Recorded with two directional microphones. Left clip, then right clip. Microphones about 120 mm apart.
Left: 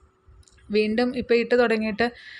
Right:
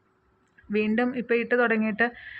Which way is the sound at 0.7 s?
35° left (ahead or behind).